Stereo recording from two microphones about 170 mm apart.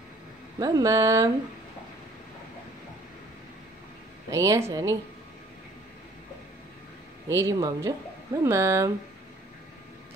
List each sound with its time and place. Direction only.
0.6 s speech: 20° right (ahead or behind)
4.3 s a woman's voice: 20° right (ahead or behind)
7.2 s a woman's voice: 15° right (ahead or behind)